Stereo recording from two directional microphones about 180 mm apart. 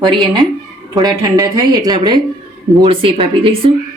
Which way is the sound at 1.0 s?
20° right (ahead or behind).